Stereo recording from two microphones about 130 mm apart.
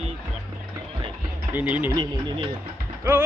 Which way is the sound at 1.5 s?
10° right (ahead or behind).